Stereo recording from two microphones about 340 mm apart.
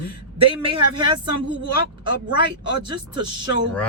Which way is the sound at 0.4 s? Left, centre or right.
Centre.